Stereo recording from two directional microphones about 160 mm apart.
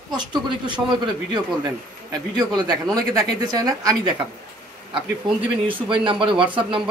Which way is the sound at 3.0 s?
25° right (ahead or behind).